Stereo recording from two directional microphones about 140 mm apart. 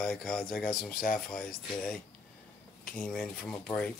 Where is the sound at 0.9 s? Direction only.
90° left.